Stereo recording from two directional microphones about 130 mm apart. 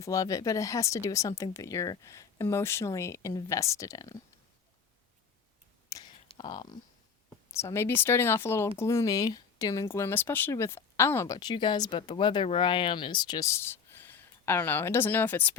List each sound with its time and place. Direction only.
0.0 s speech: 25° left (ahead or behind)
6.3 s speech: 35° left (ahead or behind)
7.5 s speech: 20° left (ahead or behind)
11.3 s speech: 35° left (ahead or behind); by 15.5 s 15° left (ahead or behind)